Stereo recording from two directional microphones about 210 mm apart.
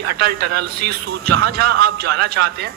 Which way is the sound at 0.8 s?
45° right (ahead or behind).